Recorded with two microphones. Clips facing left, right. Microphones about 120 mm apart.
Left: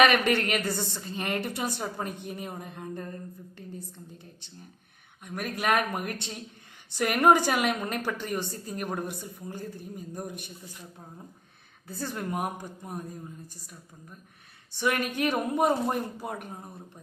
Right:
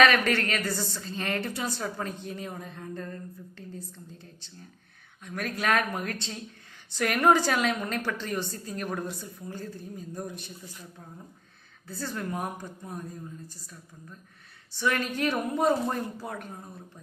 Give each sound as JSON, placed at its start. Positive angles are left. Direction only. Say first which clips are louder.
{"t": 0.0, "sound": "a woman's voice", "louder": "even", "side_deg": 15}
{"t": 5.2, "sound": "a woman's voice", "louder": "even", "side_deg": 15}
{"t": 11.9, "sound": "a woman's voice", "louder": "even", "side_deg": 15}
{"t": 14.7, "sound": "a woman's voice", "louder": "even", "side_deg": 15}